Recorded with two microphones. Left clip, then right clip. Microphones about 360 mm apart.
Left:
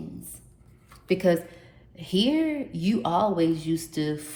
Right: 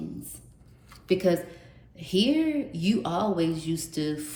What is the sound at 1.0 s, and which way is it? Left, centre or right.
A woman's voice, centre.